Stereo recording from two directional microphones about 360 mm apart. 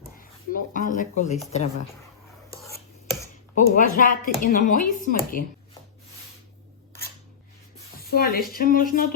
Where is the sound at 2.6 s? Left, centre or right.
Centre.